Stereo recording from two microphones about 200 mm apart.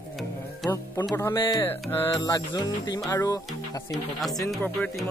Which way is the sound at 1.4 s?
20° left (ahead or behind).